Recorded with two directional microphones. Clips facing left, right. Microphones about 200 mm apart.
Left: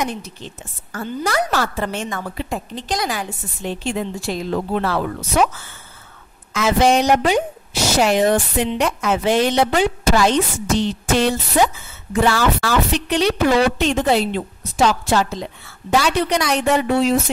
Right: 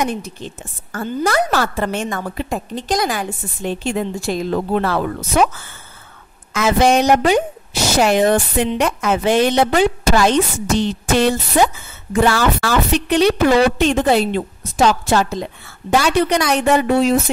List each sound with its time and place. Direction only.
0.0 s a woman's voice: 50° right (ahead or behind)
6.5 s a woman's voice: 50° right (ahead or behind)